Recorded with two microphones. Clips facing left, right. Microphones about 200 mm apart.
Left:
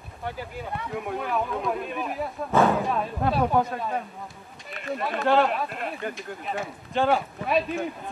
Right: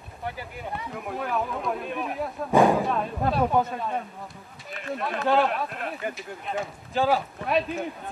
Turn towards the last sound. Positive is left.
turn(degrees=0)  # may be behind; listen again after turning